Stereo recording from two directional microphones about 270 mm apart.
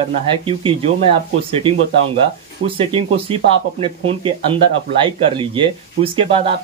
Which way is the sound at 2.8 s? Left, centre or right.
Centre.